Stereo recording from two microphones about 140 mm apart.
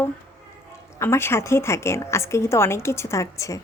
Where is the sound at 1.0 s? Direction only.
20° left (ahead or behind).